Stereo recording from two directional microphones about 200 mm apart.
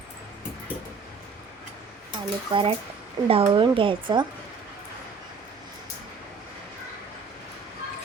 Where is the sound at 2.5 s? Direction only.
25° right (ahead or behind).